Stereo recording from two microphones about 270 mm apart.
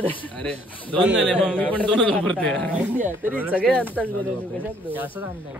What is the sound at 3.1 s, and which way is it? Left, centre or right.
Speech, centre.